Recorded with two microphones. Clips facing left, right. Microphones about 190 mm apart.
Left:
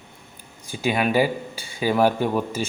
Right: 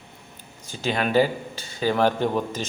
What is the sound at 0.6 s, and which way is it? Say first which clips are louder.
Speech: left 3 dB; 15° left (ahead or behind).